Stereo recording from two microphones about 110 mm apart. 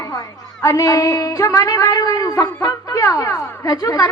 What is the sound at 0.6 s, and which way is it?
A woman's voice, 30° left (ahead or behind).